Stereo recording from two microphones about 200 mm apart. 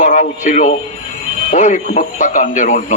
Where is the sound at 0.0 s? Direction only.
40° left (ahead or behind).